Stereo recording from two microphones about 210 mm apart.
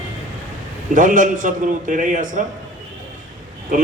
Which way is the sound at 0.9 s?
40° right (ahead or behind).